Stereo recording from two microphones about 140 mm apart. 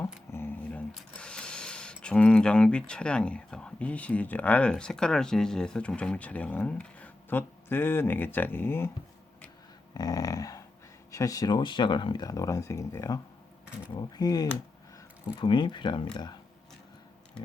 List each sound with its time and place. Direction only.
0.3 s speech: 15° left (ahead or behind)
9.9 s speech: 25° left (ahead or behind)